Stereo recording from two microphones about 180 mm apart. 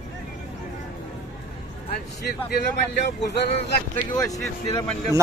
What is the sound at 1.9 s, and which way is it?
Speech, 65° left (ahead or behind).